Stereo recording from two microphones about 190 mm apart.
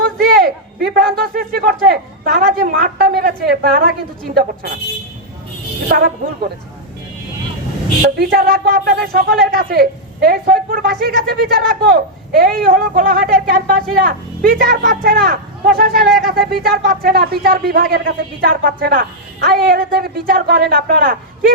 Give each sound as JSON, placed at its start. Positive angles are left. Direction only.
{"t": 0.0, "sound": "a sound", "side_deg": -50}
{"t": 4.4, "sound": "speech", "side_deg": -55}
{"t": 5.9, "sound": "a woman's voice", "side_deg": -50}
{"t": 8.2, "sound": "a woman's voice", "side_deg": -55}